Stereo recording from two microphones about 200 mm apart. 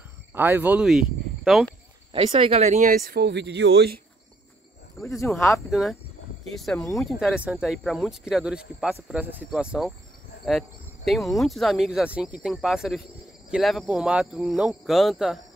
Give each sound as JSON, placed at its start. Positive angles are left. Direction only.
{"t": 0.3, "sound": "speech", "side_deg": -10}
{"t": 2.1, "sound": "speech", "side_deg": -30}
{"t": 5.0, "sound": "speech", "side_deg": 15}
{"t": 5.7, "sound": "speech", "side_deg": 0}
{"t": 11.1, "sound": "speech", "side_deg": 0}